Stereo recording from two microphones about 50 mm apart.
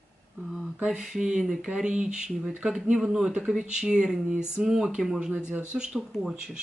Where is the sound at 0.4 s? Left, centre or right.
Right.